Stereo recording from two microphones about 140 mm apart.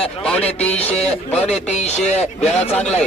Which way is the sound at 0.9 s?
50° left (ahead or behind).